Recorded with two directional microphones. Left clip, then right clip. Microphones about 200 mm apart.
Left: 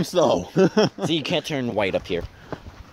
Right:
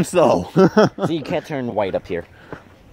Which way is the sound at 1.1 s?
15° right (ahead or behind).